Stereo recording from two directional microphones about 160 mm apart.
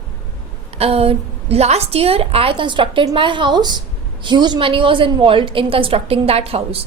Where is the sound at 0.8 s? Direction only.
40° right (ahead or behind).